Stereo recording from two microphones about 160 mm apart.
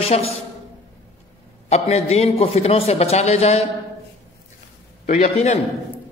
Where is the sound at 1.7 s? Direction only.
40° left (ahead or behind).